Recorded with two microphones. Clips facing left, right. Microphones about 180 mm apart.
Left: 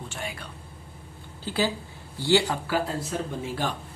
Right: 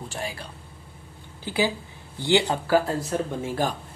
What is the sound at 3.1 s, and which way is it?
Speech, 50° right (ahead or behind).